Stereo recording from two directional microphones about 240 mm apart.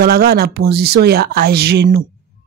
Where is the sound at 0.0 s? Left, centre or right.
Right.